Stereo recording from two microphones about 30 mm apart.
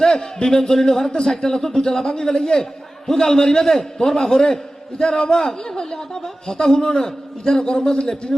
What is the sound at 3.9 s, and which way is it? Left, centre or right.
A man's voice, left.